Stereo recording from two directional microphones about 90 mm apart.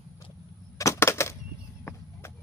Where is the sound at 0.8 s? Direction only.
35° left (ahead or behind).